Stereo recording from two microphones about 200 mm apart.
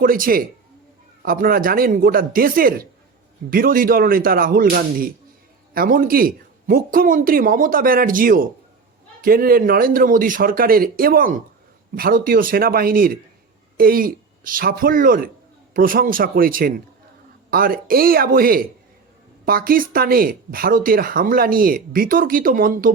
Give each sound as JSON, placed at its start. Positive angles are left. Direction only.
{"t": 0.0, "sound": "speech", "side_deg": -45}